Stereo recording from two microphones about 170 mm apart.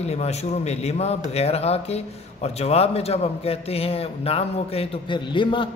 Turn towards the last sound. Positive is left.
turn(degrees=30)  # may be behind; listen again after turning